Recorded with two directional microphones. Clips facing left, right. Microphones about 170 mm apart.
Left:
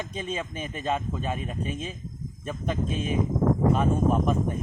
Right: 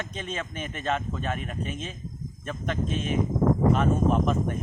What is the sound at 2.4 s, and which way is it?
Speech, 5° left (ahead or behind).